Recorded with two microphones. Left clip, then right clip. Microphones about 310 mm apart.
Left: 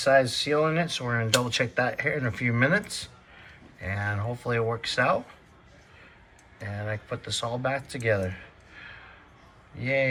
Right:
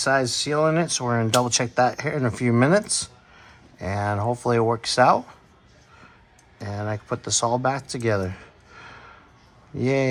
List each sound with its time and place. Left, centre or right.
0.0 s speech: centre
6.6 s speech: centre